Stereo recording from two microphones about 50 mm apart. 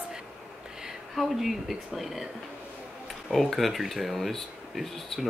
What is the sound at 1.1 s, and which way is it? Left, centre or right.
Speech, centre.